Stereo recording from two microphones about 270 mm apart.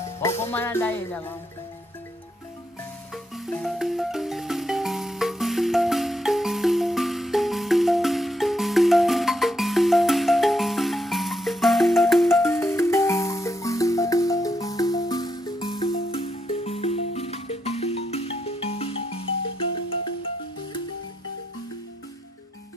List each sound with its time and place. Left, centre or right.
0.4 s music: centre
3.3 s music: centre; by 19.1 s left